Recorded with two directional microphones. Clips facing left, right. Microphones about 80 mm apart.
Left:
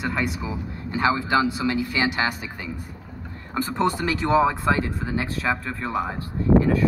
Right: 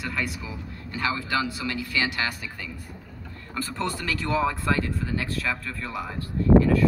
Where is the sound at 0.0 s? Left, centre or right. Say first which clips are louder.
Left 5 dB; left.